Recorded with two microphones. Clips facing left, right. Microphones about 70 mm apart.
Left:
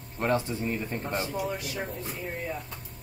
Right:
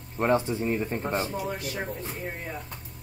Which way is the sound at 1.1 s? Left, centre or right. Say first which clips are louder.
Right 1 dB; right.